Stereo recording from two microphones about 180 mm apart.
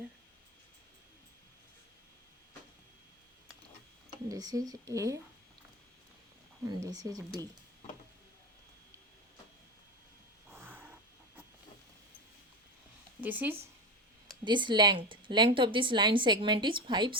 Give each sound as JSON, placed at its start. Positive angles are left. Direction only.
{"t": 4.3, "sound": "a woman's voice", "side_deg": -20}
{"t": 6.8, "sound": "a woman's voice", "side_deg": -20}
{"t": 10.5, "sound": "snort", "side_deg": -10}
{"t": 13.2, "sound": "speech", "side_deg": -10}
{"t": 14.4, "sound": "a woman's voice", "side_deg": -25}